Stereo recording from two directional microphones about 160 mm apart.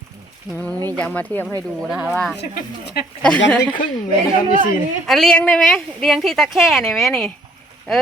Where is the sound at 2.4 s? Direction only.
80° left.